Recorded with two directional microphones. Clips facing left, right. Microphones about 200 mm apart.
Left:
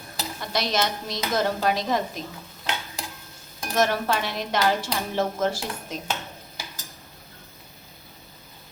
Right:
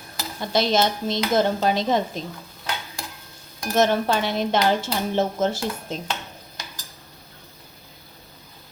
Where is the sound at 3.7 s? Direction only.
25° right (ahead or behind).